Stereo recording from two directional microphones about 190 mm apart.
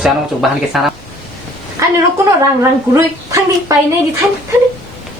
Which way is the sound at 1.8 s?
15° right (ahead or behind).